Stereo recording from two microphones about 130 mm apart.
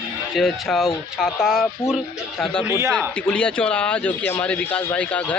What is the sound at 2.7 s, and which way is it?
Speech, 20° right (ahead or behind).